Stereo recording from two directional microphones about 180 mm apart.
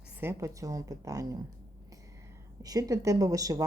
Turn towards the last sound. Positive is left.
turn(degrees=-20)  # may be behind; listen again after turning